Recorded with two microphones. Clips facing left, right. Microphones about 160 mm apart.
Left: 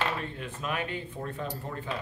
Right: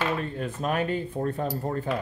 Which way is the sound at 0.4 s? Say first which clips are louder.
Right 6 dB; 40° right (ahead or behind).